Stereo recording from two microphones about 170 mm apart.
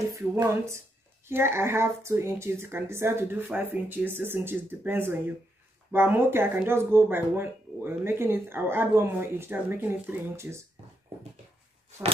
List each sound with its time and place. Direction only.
0.1 s speech: 15° right (ahead or behind)